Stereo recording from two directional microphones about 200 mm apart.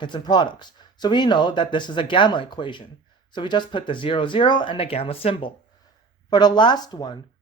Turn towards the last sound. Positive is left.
turn(degrees=20)  # may be behind; listen again after turning